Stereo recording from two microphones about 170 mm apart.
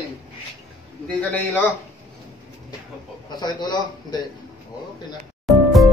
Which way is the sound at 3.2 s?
25° left (ahead or behind).